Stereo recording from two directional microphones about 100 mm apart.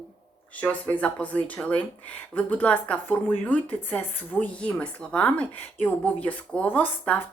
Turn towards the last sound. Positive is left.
turn(degrees=15)  # may be behind; listen again after turning